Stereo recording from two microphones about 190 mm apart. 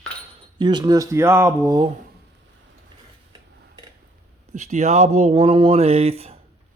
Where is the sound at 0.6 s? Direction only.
25° right (ahead or behind).